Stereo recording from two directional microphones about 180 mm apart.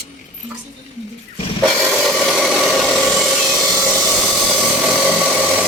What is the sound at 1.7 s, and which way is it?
Wood, centre (ahead or behind).